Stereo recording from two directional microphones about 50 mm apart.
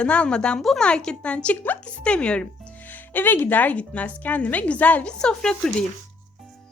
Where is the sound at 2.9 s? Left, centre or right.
Left.